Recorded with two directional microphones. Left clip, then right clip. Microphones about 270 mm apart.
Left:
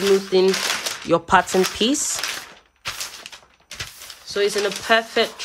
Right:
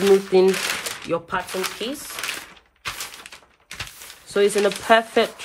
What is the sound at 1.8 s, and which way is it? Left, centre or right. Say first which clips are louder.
Speech: left 9 dB; left.